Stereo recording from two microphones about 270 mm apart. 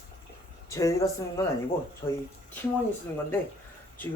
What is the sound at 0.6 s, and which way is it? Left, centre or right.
Speech, centre.